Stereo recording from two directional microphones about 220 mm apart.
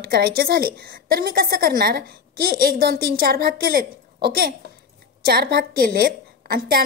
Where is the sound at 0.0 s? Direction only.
45° right (ahead or behind).